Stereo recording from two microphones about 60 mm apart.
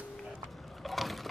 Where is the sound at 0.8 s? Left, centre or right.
Centre.